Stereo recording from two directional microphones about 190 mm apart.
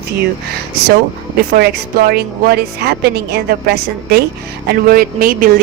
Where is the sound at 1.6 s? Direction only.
55° right (ahead or behind).